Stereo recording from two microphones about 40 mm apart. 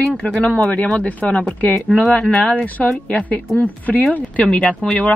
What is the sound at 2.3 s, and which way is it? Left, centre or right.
Speech, left.